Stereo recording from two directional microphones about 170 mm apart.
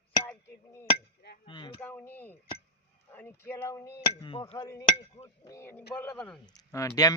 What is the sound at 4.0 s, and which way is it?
Speech, 35° left (ahead or behind).